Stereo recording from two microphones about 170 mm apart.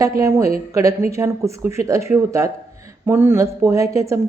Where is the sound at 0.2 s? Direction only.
20° right (ahead or behind).